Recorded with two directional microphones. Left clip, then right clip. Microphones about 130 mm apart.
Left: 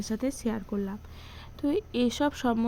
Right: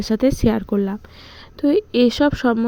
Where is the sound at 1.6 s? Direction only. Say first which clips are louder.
Right 12 dB; 40° right (ahead or behind).